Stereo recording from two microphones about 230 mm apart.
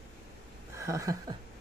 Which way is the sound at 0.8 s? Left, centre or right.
Centre.